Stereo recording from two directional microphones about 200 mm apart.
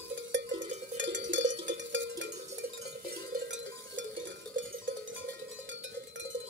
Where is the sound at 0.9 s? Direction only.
65° right (ahead or behind).